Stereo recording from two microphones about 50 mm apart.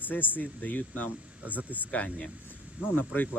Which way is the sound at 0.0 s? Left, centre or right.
Left.